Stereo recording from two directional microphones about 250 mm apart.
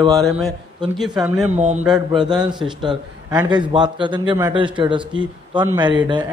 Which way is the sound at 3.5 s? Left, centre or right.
Centre.